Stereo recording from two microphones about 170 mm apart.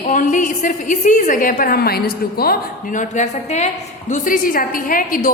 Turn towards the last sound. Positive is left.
turn(degrees=55)  # may be behind; listen again after turning